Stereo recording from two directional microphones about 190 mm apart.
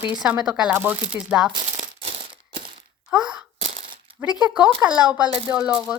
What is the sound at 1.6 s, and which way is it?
Coin, 45° right (ahead or behind).